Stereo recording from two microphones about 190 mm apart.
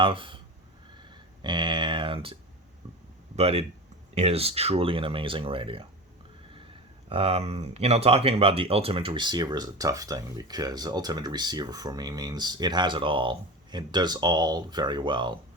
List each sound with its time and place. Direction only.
0.0 s speech: 25° right (ahead or behind)
1.4 s a sound: 25° right (ahead or behind)
3.3 s speech: 30° right (ahead or behind)
7.1 s speech: 30° right (ahead or behind)